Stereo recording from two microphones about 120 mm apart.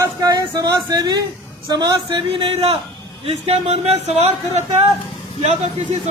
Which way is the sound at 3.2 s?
60° right (ahead or behind).